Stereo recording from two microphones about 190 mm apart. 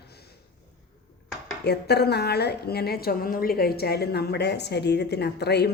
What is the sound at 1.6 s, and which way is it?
A woman's voice, 60° left (ahead or behind).